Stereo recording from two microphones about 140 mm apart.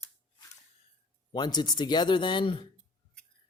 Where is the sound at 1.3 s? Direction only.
30° left (ahead or behind).